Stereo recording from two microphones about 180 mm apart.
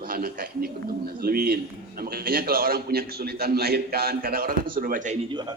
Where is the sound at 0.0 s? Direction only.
55° right (ahead or behind).